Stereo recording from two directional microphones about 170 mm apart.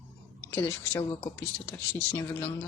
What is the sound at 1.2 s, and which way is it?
Speech, 15° left (ahead or behind).